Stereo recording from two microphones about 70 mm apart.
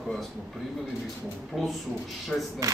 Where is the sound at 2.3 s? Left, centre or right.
Centre.